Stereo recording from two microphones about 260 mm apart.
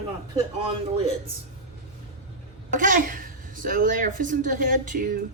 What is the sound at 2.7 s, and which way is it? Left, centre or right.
A child's voice, right.